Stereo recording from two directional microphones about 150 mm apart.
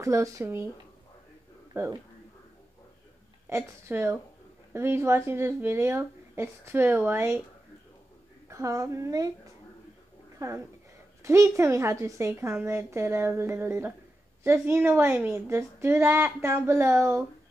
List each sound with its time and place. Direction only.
0.0 s speech: 20° right (ahead or behind)
1.7 s speech: 15° right (ahead or behind)
3.4 s a woman's voice: 15° right (ahead or behind)
8.5 s speech: 20° right (ahead or behind)
10.4 s a woman's voice: 20° right (ahead or behind)